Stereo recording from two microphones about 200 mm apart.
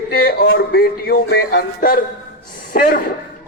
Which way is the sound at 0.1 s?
50° left (ahead or behind).